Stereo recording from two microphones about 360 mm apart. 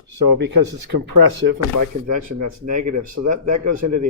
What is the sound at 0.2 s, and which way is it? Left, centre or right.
Speech, right.